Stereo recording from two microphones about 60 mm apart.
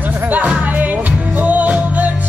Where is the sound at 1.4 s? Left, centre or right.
Right.